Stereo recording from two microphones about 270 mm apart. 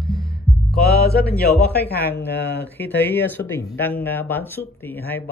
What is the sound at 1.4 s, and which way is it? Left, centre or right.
Speech, left.